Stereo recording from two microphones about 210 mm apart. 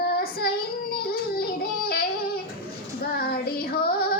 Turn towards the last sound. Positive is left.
turn(degrees=45)  # may be behind; listen again after turning